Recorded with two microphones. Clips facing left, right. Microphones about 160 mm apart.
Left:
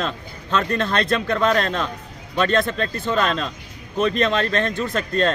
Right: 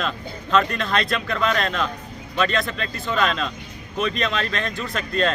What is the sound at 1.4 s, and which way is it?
Speech, 40° left (ahead or behind).